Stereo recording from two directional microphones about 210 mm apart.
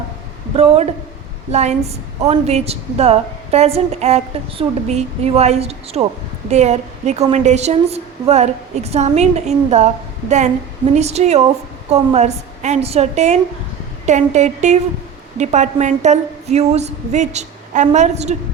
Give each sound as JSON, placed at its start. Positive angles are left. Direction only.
{"t": 0.5, "sound": "a woman's voice", "side_deg": -30}